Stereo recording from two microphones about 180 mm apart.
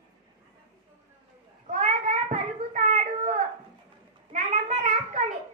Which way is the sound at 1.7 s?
45° right (ahead or behind).